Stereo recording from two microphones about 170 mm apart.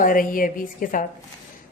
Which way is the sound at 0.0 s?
55° left (ahead or behind).